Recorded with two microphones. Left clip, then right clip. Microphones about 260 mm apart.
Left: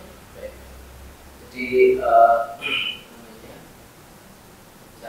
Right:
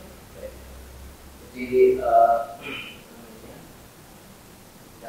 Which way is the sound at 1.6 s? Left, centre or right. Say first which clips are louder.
Left 5 dB; centre.